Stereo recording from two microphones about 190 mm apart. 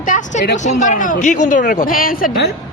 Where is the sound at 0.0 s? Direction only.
40° left (ahead or behind).